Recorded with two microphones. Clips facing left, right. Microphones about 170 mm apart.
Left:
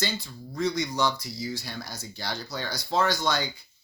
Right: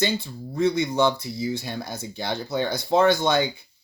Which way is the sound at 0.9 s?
25° right (ahead or behind).